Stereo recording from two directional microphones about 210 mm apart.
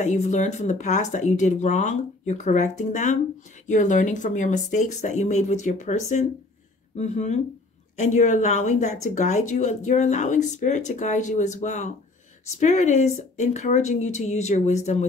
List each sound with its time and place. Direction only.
0.0 s speech: 35° left (ahead or behind)